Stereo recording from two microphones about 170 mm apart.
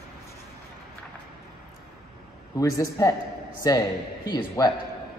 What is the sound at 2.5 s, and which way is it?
A man's voice, 20° left (ahead or behind).